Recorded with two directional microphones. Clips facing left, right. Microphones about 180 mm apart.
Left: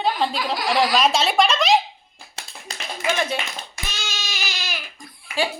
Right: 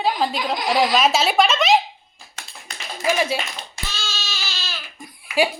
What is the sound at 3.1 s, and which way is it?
Speech, 5° right (ahead or behind).